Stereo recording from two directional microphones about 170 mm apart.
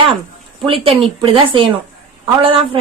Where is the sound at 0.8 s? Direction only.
35° right (ahead or behind).